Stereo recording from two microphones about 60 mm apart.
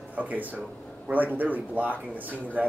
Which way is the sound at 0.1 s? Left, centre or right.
Right.